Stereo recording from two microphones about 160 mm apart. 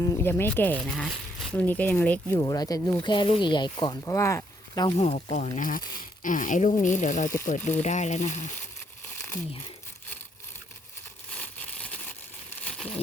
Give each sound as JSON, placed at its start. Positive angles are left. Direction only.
{"t": 0.0, "sound": "speech", "side_deg": 15}
{"t": 2.5, "sound": "speech", "side_deg": 25}
{"t": 5.0, "sound": "speech", "side_deg": 45}
{"t": 11.3, "sound": "a sound", "side_deg": 5}